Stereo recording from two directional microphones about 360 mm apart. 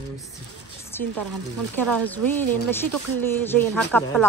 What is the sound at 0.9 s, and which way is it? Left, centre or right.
A woman's voice, centre.